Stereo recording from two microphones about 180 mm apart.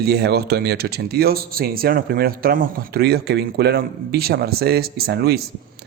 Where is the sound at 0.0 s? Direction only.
65° right (ahead or behind).